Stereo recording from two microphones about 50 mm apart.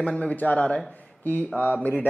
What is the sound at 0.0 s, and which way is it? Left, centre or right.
A man's voice, centre.